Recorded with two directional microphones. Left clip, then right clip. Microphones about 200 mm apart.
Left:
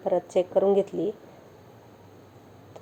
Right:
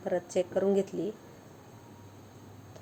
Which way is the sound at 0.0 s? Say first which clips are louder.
Left 6 dB; 20° left (ahead or behind).